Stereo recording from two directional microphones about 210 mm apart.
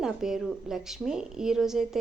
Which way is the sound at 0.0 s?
Centre (ahead or behind).